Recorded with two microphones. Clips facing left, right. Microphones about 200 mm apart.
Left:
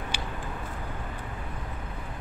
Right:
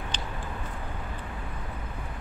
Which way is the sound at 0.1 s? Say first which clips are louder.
Left 1 dB; 10° left (ahead or behind).